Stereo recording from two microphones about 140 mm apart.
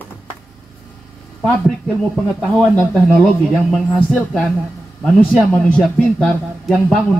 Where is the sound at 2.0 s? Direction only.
5° left (ahead or behind).